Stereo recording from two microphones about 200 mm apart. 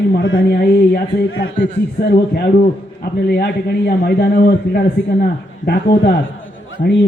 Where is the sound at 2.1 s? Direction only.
45° left (ahead or behind).